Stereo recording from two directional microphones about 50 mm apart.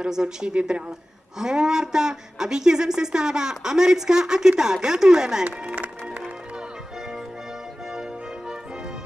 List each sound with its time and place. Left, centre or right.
0.0 s a woman's voice: centre